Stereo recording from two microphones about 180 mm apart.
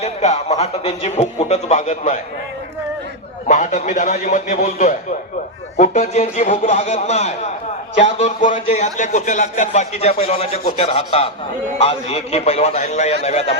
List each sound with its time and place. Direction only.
0.0 s a man's voice: 35° left (ahead or behind)
3.4 s a man's voice: 45° left (ahead or behind)